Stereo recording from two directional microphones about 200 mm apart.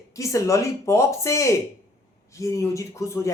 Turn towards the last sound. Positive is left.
turn(degrees=15)  # may be behind; listen again after turning